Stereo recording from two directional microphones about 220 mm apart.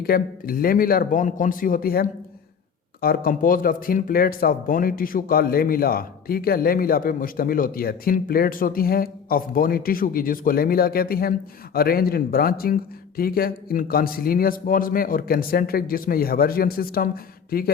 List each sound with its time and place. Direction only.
0.0 s speech: 40° left (ahead or behind)